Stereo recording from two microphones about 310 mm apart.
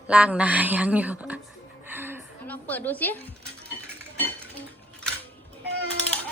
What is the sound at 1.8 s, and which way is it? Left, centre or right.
Chuckle, centre.